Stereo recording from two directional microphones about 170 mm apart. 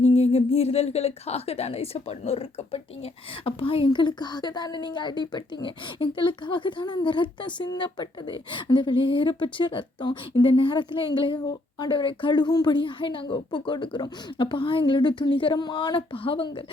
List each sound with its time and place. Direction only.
0.1 s speech: 40° left (ahead or behind)